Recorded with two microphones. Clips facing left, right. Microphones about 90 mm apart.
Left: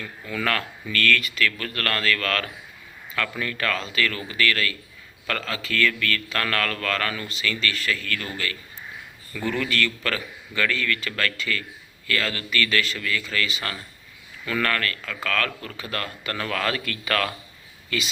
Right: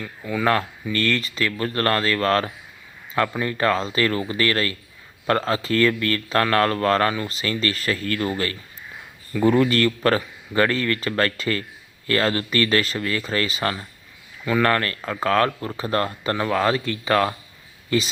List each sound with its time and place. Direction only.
0.0 s speech: 15° right (ahead or behind); by 13.7 s 35° right (ahead or behind)
14.4 s speech: 25° right (ahead or behind)